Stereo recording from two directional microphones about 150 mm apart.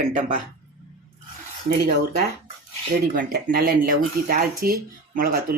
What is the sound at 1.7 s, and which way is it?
Speech, 90° right.